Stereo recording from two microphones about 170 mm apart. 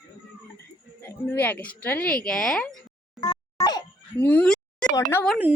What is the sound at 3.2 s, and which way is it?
Music, 25° left (ahead or behind).